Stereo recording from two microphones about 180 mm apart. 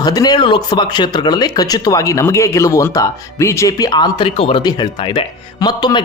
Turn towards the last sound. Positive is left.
turn(degrees=25)  # may be behind; listen again after turning